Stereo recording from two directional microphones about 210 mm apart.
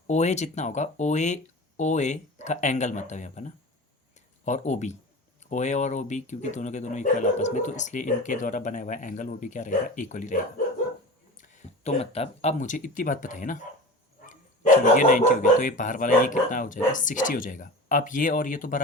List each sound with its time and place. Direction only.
0.1 s speech: 30° left (ahead or behind)
14.9 s speech: 40° left (ahead or behind)